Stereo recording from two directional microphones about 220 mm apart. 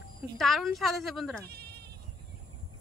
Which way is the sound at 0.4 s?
Centre (ahead or behind).